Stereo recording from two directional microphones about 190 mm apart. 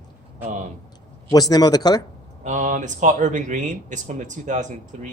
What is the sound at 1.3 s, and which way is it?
Speech, 20° left (ahead or behind).